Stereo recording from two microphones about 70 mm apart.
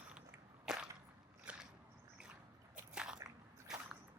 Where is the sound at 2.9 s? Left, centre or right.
Centre.